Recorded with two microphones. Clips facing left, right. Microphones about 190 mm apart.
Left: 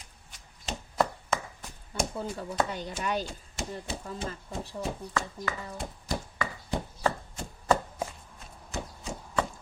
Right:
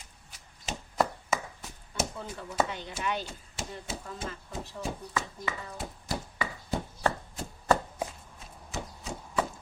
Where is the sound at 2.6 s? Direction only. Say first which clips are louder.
Left 1 dB; 40° left (ahead or behind).